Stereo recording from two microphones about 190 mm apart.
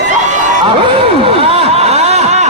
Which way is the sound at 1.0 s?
30° right (ahead or behind).